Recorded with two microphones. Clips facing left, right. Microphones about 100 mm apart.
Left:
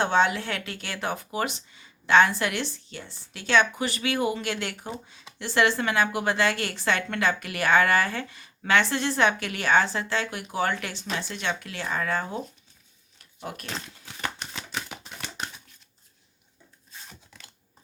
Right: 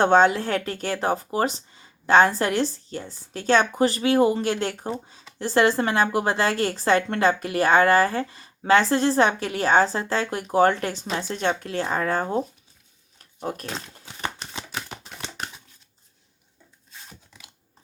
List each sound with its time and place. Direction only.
0.0 s a woman's voice: 45° right (ahead or behind)
13.4 s a woman's voice: 35° right (ahead or behind)